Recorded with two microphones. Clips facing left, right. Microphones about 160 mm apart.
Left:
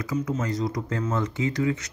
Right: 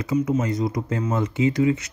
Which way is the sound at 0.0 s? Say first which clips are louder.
Right 5 dB; 25° right (ahead or behind).